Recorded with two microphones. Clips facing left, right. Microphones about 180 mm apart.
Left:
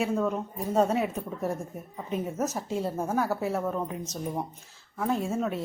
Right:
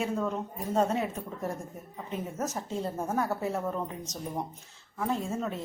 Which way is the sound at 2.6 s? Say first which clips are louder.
Left 3 dB; 5° left (ahead or behind).